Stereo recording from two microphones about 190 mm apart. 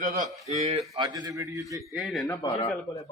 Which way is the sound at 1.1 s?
15° right (ahead or behind).